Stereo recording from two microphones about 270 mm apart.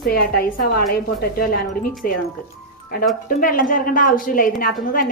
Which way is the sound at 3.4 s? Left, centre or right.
Left.